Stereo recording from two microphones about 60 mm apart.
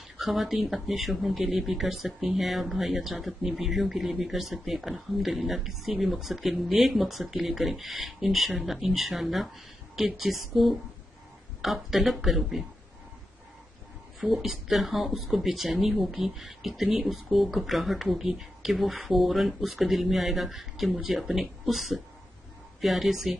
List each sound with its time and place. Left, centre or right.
0.2 s speech: centre
14.2 s speech: centre